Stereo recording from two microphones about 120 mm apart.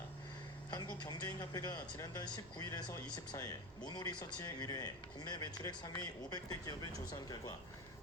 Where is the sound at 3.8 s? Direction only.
35° left (ahead or behind).